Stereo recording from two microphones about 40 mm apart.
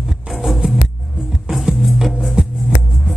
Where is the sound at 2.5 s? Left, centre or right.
Centre.